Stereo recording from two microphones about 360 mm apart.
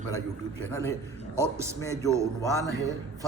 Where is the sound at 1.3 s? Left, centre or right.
Centre.